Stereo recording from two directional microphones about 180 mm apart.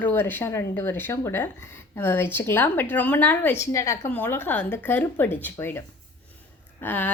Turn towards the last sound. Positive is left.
turn(degrees=10)  # may be behind; listen again after turning